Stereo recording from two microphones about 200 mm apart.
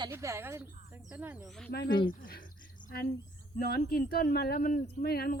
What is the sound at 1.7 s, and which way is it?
Speech, 50° left (ahead or behind).